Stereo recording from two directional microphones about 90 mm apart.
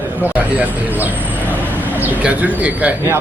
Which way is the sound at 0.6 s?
20° right (ahead or behind).